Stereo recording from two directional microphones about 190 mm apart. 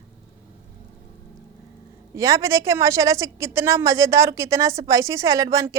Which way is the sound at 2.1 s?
15° right (ahead or behind).